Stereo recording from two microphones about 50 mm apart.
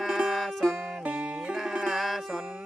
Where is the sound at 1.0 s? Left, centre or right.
Centre.